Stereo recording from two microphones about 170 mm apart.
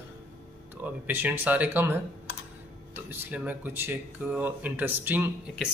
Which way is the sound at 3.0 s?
10° right (ahead or behind).